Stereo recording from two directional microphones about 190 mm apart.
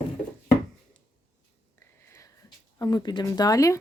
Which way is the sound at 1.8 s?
15° left (ahead or behind).